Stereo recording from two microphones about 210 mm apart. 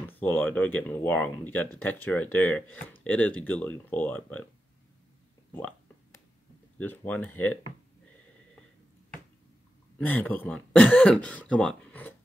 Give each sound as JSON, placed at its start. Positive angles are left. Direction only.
{"t": 0.1, "sound": "speech", "side_deg": 10}
{"t": 5.5, "sound": "a sound", "side_deg": 10}
{"t": 6.8, "sound": "speech", "side_deg": 10}
{"t": 9.9, "sound": "speech", "side_deg": 10}